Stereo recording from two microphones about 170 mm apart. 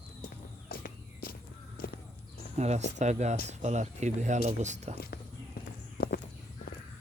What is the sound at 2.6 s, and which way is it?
Speech, 40° right (ahead or behind).